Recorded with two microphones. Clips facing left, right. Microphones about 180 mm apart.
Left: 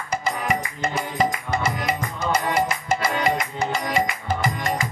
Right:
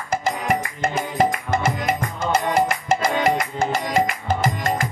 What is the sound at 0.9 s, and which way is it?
Music, 50° right (ahead or behind).